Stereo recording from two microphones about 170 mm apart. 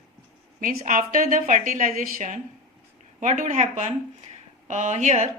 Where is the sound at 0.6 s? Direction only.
50° right (ahead or behind).